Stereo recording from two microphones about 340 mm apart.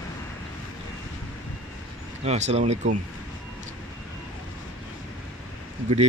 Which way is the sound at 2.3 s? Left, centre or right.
Centre.